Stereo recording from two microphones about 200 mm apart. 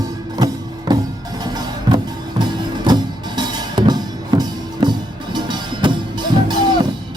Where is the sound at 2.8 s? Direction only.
20° right (ahead or behind).